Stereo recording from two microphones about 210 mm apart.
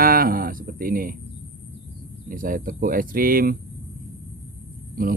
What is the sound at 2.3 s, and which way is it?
Speech, 40° right (ahead or behind).